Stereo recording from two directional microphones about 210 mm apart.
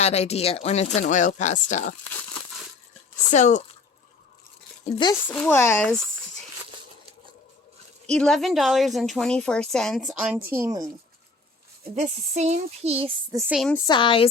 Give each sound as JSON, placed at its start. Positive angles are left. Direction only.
{"t": 0.0, "sound": "speech", "side_deg": 30}
{"t": 3.3, "sound": "speech", "side_deg": 35}
{"t": 4.9, "sound": "speech", "side_deg": 20}
{"t": 5.3, "sound": "speech", "side_deg": 10}
{"t": 8.0, "sound": "a woman's voice", "side_deg": 5}
{"t": 11.9, "sound": "speech", "side_deg": -35}
{"t": 13.5, "sound": "a woman's voice", "side_deg": 0}
{"t": 13.8, "sound": "speech", "side_deg": 20}